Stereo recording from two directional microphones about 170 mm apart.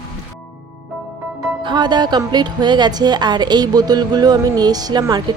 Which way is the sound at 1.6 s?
25° right (ahead or behind).